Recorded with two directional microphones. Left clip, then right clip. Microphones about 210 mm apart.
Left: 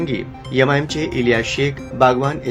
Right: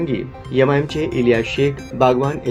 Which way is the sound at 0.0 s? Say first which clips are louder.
Right 1 dB; 10° left (ahead or behind).